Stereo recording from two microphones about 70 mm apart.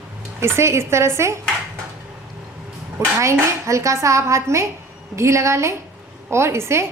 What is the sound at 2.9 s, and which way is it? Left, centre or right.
A woman's voice, right.